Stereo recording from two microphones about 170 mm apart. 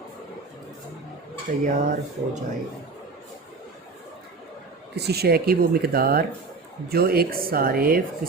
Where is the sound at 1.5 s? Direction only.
50° right (ahead or behind).